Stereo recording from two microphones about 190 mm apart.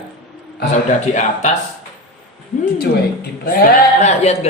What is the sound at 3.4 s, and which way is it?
Speech, 45° left (ahead or behind).